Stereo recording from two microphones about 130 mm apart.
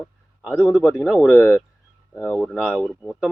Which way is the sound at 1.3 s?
15° left (ahead or behind).